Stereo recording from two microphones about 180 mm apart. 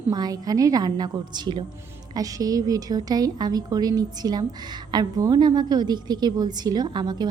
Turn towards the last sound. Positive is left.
turn(degrees=-25)  # may be behind; listen again after turning